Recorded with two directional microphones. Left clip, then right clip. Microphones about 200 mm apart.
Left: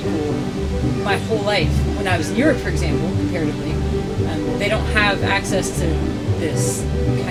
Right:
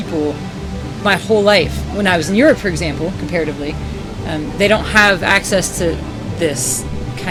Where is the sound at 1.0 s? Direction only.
35° right (ahead or behind).